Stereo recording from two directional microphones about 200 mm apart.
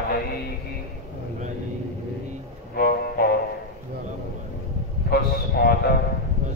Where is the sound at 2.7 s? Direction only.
50° left (ahead or behind).